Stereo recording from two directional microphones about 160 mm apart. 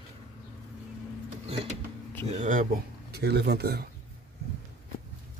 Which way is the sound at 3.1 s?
90° right.